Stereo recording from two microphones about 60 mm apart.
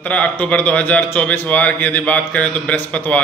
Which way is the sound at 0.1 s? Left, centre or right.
Left.